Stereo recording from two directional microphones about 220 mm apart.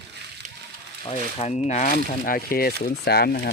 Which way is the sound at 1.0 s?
30° left (ahead or behind).